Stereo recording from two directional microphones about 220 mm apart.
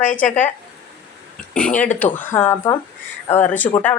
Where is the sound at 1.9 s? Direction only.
35° left (ahead or behind).